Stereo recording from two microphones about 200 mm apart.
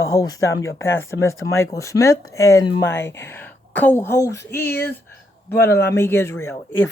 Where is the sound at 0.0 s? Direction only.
20° left (ahead or behind).